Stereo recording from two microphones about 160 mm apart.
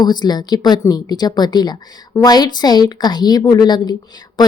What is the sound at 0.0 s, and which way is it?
Speech, 25° left (ahead or behind).